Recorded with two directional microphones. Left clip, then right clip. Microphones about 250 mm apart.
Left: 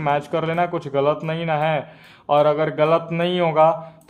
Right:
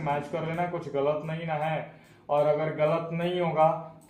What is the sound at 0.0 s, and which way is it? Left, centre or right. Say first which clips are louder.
Speech: left 9 dB; left.